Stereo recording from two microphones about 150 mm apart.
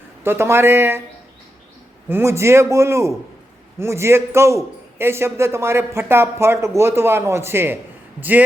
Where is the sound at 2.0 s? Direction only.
15° right (ahead or behind).